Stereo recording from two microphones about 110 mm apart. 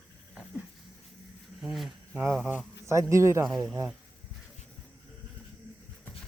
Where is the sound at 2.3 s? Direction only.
15° right (ahead or behind).